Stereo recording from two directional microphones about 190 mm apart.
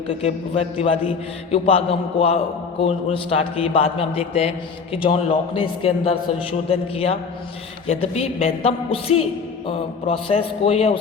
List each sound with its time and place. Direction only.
0.1 s a man's voice: 30° left (ahead or behind)